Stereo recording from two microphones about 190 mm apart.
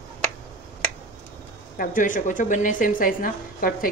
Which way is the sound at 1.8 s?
45° left (ahead or behind).